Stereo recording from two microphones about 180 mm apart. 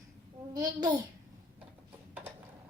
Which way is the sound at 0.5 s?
20° right (ahead or behind).